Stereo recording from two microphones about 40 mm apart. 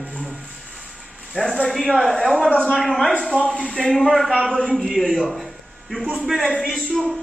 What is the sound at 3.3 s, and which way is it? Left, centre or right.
Speech, right.